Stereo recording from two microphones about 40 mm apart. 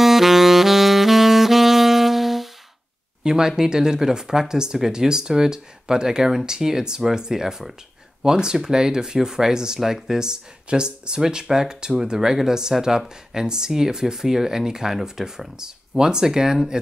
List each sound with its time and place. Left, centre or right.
0.0 s saxophone: centre
3.3 s speech: centre